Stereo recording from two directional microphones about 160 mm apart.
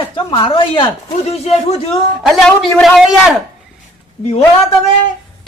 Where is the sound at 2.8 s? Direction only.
Centre (ahead or behind).